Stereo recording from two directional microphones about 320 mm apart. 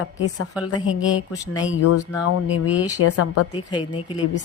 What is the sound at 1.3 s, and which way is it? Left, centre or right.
Speech, centre.